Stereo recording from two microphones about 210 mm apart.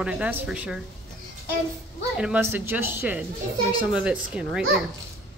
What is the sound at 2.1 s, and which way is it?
Speech, 5° right (ahead or behind).